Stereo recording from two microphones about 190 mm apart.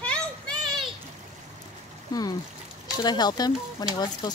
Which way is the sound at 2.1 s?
20° left (ahead or behind).